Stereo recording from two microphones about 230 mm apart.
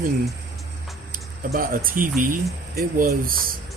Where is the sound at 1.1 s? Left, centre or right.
Right.